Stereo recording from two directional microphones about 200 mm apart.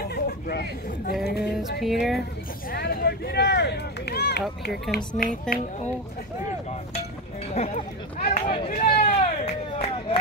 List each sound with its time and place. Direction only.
0.1 s speech: 55° left (ahead or behind)
1.2 s music: 55° left (ahead or behind)
1.8 s speech: centre (ahead or behind)
2.7 s speech: 50° left (ahead or behind)
5.5 s speech: 5° left (ahead or behind)
7.5 s speech: 35° left (ahead or behind)
8.6 s a sound: 40° left (ahead or behind)